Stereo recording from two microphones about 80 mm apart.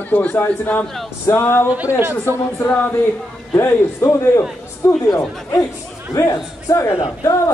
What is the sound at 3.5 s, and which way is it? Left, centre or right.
A man's voice, left.